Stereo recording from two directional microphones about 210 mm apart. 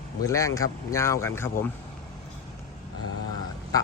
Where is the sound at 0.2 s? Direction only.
15° left (ahead or behind).